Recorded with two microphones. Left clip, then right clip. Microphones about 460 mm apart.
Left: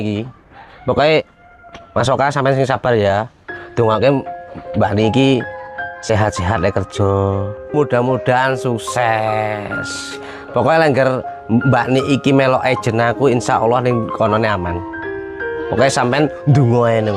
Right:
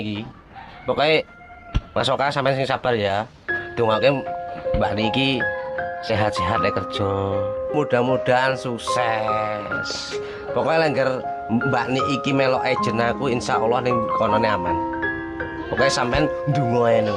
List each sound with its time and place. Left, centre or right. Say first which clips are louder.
0.0 s speech: left 7 dB; left
15.8 s speech: left 5 dB; left